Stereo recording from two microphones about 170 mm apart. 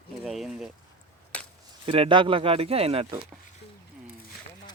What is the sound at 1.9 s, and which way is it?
Speech, 30° right (ahead or behind).